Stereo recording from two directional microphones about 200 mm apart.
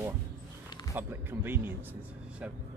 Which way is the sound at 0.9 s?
10° right (ahead or behind).